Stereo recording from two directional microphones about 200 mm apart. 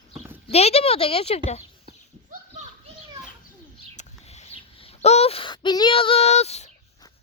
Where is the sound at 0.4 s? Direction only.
30° left (ahead or behind).